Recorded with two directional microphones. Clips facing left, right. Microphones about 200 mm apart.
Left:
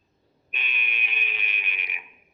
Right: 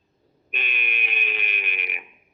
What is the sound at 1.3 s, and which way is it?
Music, 70° right (ahead or behind).